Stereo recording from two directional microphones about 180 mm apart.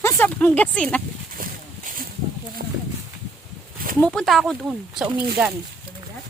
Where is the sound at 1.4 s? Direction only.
50° right (ahead or behind).